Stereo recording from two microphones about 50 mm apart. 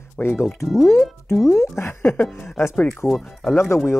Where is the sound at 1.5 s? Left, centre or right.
Left.